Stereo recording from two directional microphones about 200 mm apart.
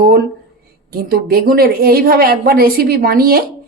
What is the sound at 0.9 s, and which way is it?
A woman's voice, 50° right (ahead or behind).